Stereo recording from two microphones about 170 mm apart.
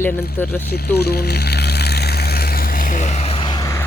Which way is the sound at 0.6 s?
70° left (ahead or behind).